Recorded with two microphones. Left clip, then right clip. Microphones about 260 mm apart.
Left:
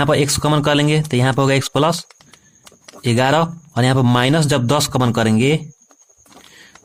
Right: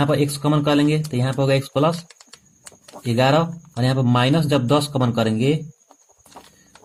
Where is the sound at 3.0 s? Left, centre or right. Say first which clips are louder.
Left 2 dB; left.